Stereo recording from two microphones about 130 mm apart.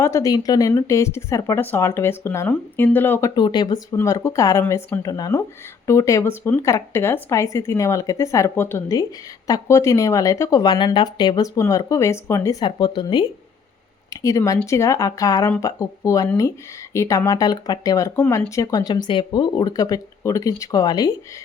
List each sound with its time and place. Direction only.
0.0 s speech: 25° left (ahead or behind)
3.2 s speech: 30° left (ahead or behind)
3.9 s speech: 25° left (ahead or behind)
4.6 s a woman's voice: 15° left (ahead or behind)
5.0 s speech: 30° left (ahead or behind)
14.1 s speech: 25° left (ahead or behind)